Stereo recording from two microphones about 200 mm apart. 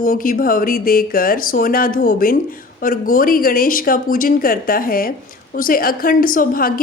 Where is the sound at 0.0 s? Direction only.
45° left (ahead or behind).